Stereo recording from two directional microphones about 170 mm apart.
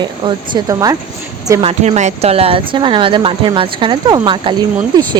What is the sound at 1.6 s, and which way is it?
Speech, 40° right (ahead or behind).